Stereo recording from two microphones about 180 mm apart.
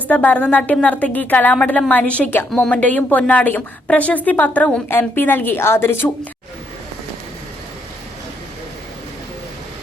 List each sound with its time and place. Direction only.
0.1 s a woman's voice: 10° left (ahead or behind)